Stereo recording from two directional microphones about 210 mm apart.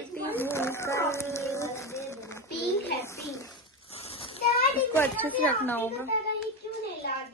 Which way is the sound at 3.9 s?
30° left (ahead or behind).